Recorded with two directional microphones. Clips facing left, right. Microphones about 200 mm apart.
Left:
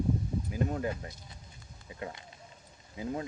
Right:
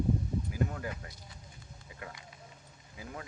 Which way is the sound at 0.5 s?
25° left (ahead or behind).